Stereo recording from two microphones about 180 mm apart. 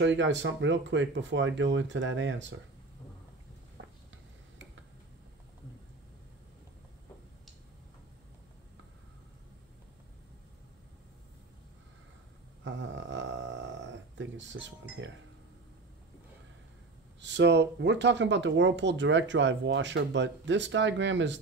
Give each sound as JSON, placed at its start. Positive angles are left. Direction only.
{"t": 0.0, "sound": "speech", "side_deg": -85}
{"t": 12.6, "sound": "a sound", "side_deg": -90}
{"t": 17.2, "sound": "speech", "side_deg": -80}